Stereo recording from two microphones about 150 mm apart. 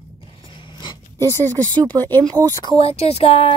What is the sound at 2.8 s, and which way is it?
Speech, 40° left (ahead or behind).